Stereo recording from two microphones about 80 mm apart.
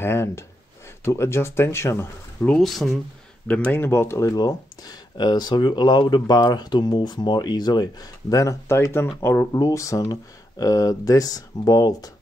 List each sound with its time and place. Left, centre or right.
0.0 s speech: left
2.4 s speech: centre
3.4 s speech: centre; by 4.3 s left
4.3 s speech: left
8.7 s speech: left
9.6 s speech: left